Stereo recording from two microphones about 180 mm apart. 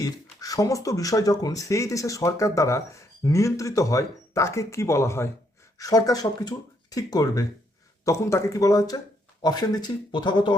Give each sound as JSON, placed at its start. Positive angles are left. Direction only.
{"t": 0.0, "sound": "speech", "side_deg": 20}